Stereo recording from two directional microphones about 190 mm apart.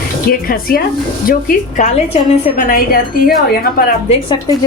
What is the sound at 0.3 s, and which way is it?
A woman's voice, 50° left (ahead or behind).